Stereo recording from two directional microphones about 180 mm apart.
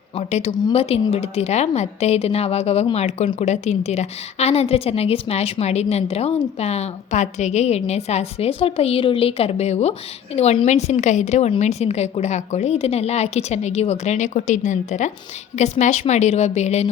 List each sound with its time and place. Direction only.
0.2 s a woman's voice: 35° left (ahead or behind)